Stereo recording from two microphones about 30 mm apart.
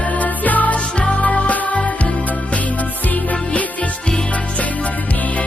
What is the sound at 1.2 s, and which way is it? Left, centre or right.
Music, left.